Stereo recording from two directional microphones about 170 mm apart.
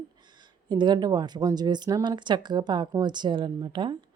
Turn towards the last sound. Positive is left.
turn(degrees=-30)  # may be behind; listen again after turning